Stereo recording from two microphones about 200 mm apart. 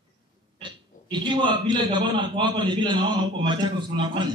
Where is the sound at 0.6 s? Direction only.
25° right (ahead or behind).